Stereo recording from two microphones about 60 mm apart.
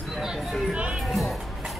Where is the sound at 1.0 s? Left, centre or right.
Centre.